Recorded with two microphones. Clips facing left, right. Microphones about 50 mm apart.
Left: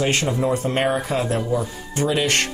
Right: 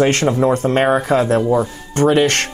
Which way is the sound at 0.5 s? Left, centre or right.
Right.